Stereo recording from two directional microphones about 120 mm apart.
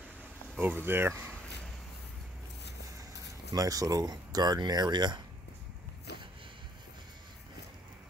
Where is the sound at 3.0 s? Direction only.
30° right (ahead or behind).